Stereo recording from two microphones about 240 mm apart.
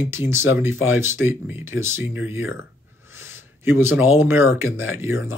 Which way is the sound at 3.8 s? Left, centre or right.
Centre.